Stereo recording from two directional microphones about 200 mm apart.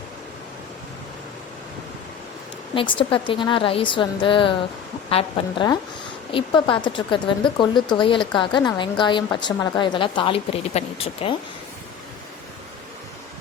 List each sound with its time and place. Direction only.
2.7 s a woman's voice: 25° left (ahead or behind)